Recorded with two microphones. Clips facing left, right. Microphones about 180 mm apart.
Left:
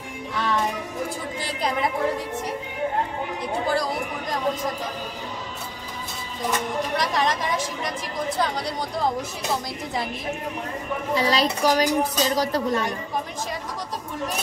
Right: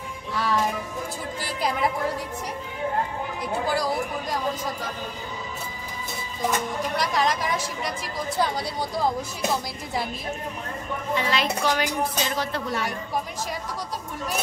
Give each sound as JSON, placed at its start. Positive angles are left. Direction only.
{"t": 3.6, "sound": "chatter", "side_deg": -5}
{"t": 7.0, "sound": "a woman's voice", "side_deg": 0}
{"t": 11.1, "sound": "music", "side_deg": 35}